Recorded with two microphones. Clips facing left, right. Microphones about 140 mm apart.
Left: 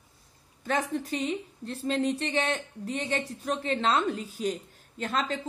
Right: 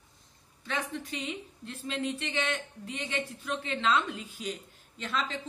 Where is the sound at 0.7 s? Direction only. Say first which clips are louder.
Left 6 dB; 45° left (ahead or behind).